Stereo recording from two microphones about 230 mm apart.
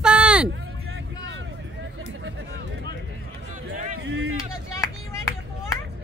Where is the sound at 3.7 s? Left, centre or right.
Right.